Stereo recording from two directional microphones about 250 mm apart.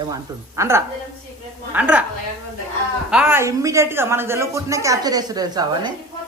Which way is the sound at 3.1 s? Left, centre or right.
Centre.